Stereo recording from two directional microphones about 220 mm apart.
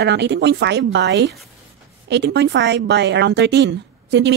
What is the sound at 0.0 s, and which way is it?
A woman's voice, 50° right (ahead or behind).